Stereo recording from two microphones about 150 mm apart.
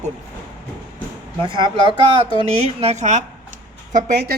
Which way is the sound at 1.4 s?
35° right (ahead or behind).